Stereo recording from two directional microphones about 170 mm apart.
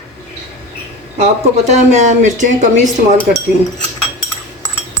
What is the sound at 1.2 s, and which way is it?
Speech, 45° right (ahead or behind).